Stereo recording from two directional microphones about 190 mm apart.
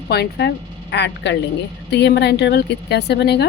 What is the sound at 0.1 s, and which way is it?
A woman's voice, 60° left (ahead or behind).